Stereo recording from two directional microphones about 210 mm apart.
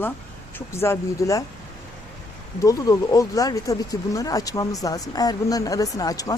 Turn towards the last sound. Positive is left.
turn(degrees=15)  # may be behind; listen again after turning